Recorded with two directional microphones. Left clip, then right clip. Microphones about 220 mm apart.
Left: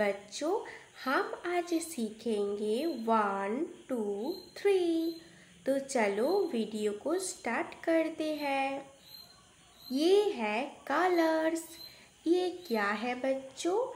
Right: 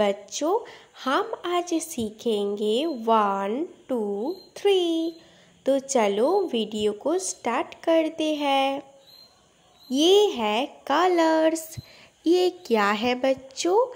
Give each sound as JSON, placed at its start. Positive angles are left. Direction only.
{"t": 0.0, "sound": "a woman's voice", "side_deg": -35}
{"t": 9.8, "sound": "a woman's voice", "side_deg": -35}